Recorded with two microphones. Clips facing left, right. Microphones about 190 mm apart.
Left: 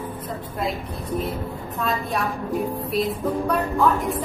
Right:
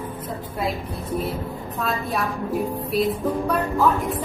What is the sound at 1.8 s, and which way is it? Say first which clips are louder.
Music: even; centre (ahead or behind).